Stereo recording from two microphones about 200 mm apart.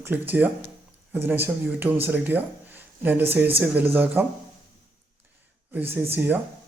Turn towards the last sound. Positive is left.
turn(degrees=-10)  # may be behind; listen again after turning